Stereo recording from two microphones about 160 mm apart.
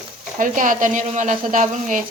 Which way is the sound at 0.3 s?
55° right (ahead or behind).